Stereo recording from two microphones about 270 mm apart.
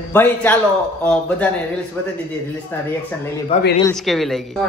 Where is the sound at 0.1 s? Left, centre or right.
Centre.